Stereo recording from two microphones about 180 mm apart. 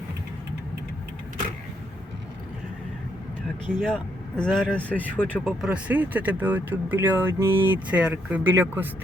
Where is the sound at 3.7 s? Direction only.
5° left (ahead or behind).